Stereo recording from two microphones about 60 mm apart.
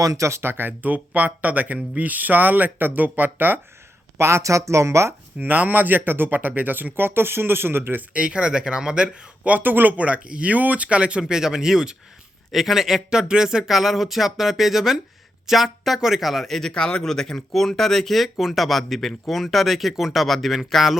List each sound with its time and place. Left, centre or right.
0.0 s speech: right
0.3 s speech: right
4.2 s speech: right
5.4 s speech: right
8.1 s speech: centre